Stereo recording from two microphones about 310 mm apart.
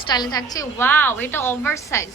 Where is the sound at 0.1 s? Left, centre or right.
Centre.